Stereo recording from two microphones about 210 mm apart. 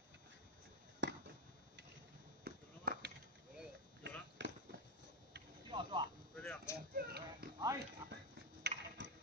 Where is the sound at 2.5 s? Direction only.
50° right (ahead or behind).